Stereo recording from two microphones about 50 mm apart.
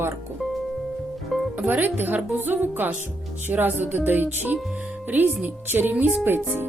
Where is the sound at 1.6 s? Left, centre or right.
Right.